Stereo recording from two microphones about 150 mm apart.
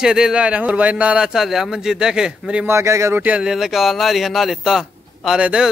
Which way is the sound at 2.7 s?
20° right (ahead or behind).